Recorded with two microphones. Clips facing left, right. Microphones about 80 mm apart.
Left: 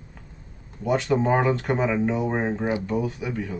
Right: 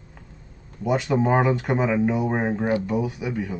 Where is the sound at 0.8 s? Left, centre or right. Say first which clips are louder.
Even; centre.